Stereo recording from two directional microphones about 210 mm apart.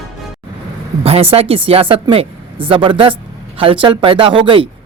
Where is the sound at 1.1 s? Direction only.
30° right (ahead or behind).